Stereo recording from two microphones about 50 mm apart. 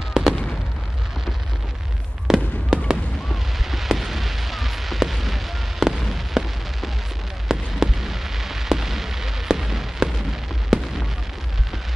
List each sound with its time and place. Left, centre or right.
0.2 s fireworks: centre
2.2 s fireworks: centre
3.7 s a sound: centre
7.4 s fireworks: centre